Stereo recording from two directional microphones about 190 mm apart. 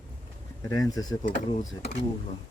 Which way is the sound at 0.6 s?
20° left (ahead or behind).